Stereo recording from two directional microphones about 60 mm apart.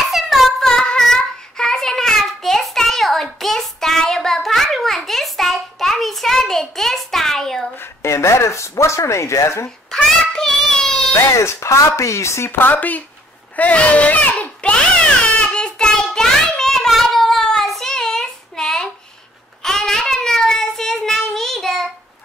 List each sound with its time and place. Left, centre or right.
0.1 s child singing: centre
7.7 s a sound: left
9.8 s a sound: centre
11.1 s speech: left
12.5 s speech: left
13.6 s baby cry: left
15.5 s child singing: centre